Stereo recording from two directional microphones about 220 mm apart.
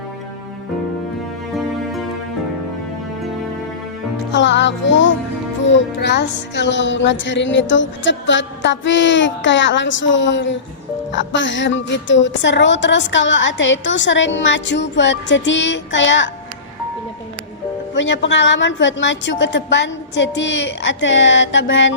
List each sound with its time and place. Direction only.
4.3 s a woman's voice: 55° left (ahead or behind)
17.9 s a woman's voice: 55° left (ahead or behind)